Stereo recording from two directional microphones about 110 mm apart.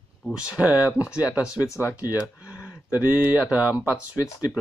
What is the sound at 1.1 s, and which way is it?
Speech, 30° left (ahead or behind).